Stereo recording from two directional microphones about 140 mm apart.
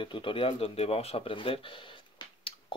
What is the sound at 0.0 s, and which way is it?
Speech, 35° left (ahead or behind).